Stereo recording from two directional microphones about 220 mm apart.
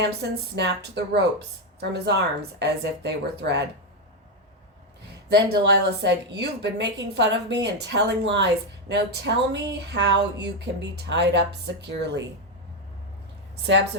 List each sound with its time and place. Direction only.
0.1 s speech: 50° right (ahead or behind)
5.3 s speech: 50° right (ahead or behind)
13.6 s speech: 55° right (ahead or behind)